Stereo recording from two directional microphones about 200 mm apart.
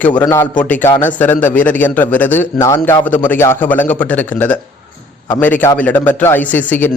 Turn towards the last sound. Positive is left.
turn(degrees=10)  # may be behind; listen again after turning